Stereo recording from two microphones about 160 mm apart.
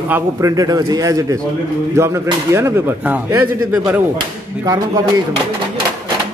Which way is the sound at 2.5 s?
15° right (ahead or behind).